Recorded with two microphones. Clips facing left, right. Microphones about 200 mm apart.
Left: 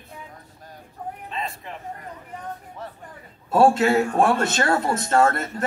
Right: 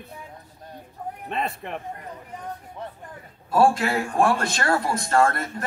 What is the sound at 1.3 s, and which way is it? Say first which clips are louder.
Speech: right 7 dB; 60° right (ahead or behind).